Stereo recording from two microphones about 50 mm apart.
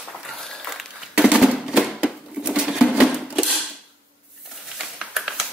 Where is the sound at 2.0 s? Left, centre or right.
Centre.